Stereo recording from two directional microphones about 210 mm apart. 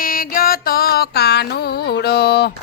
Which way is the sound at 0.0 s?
40° left (ahead or behind).